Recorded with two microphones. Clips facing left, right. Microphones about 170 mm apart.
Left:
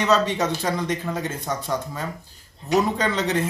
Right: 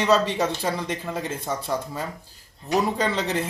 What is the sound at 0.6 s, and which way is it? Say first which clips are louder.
Speech: left 2 dB; 5° right (ahead or behind).